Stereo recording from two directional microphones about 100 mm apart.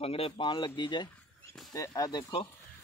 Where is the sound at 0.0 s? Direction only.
70° left (ahead or behind); by 2.2 s 40° left (ahead or behind).